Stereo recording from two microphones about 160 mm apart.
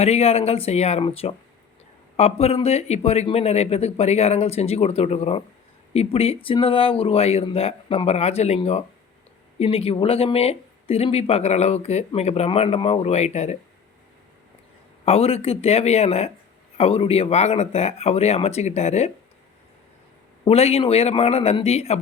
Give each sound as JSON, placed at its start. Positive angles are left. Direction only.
{"t": 0.0, "sound": "speech", "side_deg": 40}
{"t": 15.0, "sound": "speech", "side_deg": 40}
{"t": 20.4, "sound": "speech", "side_deg": 40}